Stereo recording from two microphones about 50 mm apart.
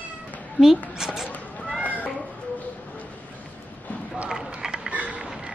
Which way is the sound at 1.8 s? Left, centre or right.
Right.